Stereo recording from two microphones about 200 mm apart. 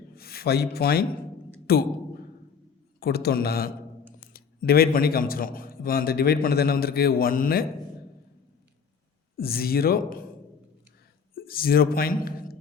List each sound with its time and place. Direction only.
0.2 s a man's voice: 50° left (ahead or behind)
3.0 s a man's voice: 55° left (ahead or behind)
9.4 s a man's voice: 50° left (ahead or behind)
11.3 s a man's voice: 50° left (ahead or behind)